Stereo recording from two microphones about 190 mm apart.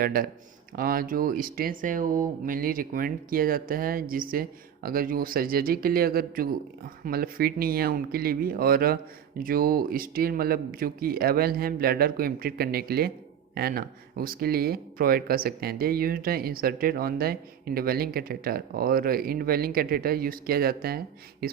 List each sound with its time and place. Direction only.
0.0 s speech: 50° right (ahead or behind)